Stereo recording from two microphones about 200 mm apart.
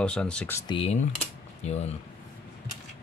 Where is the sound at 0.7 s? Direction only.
30° left (ahead or behind).